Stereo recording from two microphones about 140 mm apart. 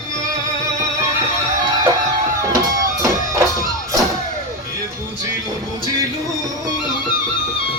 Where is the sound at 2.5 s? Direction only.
20° right (ahead or behind).